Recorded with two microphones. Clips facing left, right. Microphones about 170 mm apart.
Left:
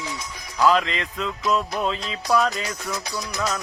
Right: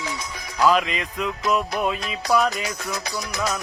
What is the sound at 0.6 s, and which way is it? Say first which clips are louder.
Music: even; 15° right (ahead or behind).